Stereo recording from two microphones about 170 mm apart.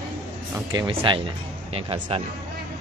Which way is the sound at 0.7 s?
30° right (ahead or behind).